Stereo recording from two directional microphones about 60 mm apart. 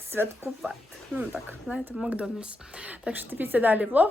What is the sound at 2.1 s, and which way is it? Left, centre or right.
A woman's voice, centre.